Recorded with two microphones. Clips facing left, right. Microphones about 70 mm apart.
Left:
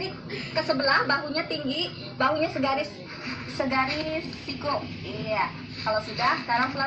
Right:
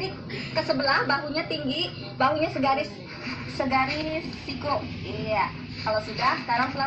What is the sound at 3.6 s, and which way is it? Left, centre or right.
Speech, centre.